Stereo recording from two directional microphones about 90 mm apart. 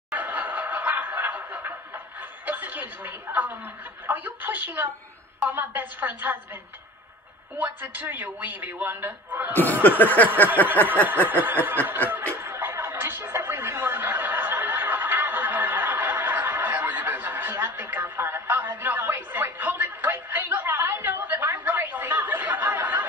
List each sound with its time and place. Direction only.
0.1 s giggle: 20° right (ahead or behind)
2.4 s a woman's voice: 20° right (ahead or behind)
7.5 s a man's voice: 20° right (ahead or behind)
10.6 s a sound: 20° left (ahead or behind)
11.1 s a man's voice: 20° right (ahead or behind)
12.1 s music: 25° right (ahead or behind)